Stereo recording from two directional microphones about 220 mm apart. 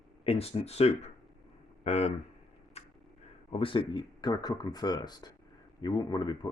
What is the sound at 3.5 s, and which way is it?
Speech, 25° left (ahead or behind).